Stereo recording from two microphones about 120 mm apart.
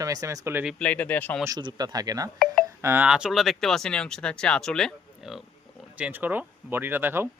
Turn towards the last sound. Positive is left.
turn(degrees=-20)  # may be behind; listen again after turning